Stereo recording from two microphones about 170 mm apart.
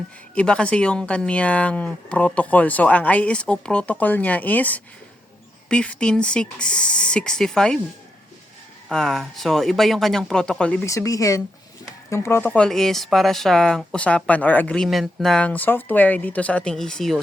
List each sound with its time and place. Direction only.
0.3 s speech: 5° left (ahead or behind)
8.9 s speech: centre (ahead or behind)
10.8 s speech: 20° left (ahead or behind); by 17.2 s 5° left (ahead or behind)